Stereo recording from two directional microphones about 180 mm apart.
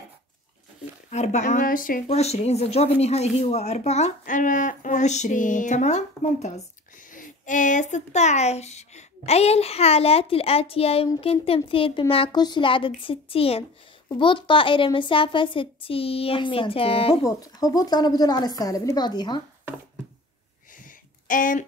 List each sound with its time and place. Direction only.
1.1 s a woman's voice: 40° left (ahead or behind)
17.2 s a woman's voice: 20° left (ahead or behind)
20.8 s a sound: 50° left (ahead or behind)